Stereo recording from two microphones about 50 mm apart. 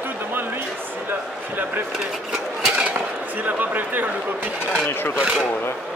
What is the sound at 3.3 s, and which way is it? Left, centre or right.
Speech, right.